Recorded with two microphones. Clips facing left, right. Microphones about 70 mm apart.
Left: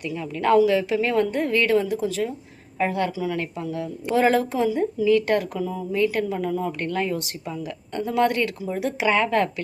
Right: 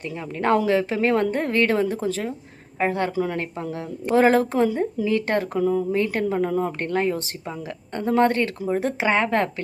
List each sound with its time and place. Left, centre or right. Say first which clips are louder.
0.0 s a woman's voice: even; right
3.2 s a woman's voice: right 2 dB; right
5.0 s a woman's voice: left 5 dB; right